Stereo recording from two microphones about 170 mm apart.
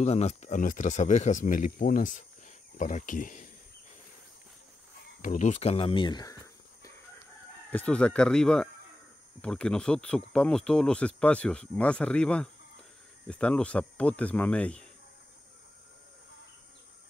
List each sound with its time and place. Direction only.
0.0 s speech: 40° left (ahead or behind)
5.2 s speech: 50° left (ahead or behind); by 6.9 s 20° left (ahead or behind)
7.7 s speech: 5° left (ahead or behind)